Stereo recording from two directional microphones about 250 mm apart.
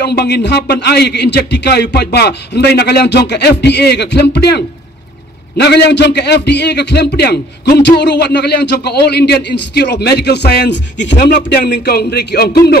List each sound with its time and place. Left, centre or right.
0.0 s a man's voice: left